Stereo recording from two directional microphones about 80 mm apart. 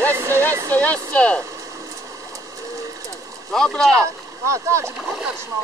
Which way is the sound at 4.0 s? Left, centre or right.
Right.